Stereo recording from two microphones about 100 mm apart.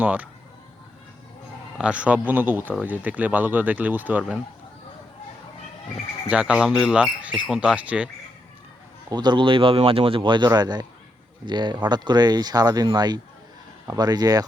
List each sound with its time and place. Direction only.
0.0 s speech: 15° right (ahead or behind)
1.8 s speech: 10° right (ahead or behind)
6.2 s speech: 10° right (ahead or behind)
9.0 s speech: 50° right (ahead or behind)